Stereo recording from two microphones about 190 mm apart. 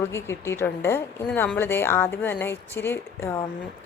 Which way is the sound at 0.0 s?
15° left (ahead or behind).